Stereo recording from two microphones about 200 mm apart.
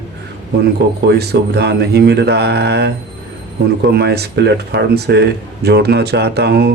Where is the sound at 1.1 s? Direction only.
55° right (ahead or behind).